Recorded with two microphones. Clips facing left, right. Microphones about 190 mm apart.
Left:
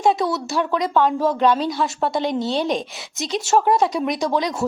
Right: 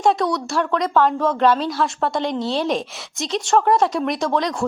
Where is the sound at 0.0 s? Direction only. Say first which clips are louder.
Even; centre (ahead or behind).